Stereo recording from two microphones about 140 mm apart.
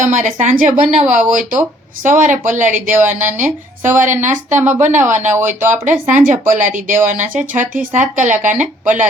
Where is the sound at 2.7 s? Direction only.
15° right (ahead or behind).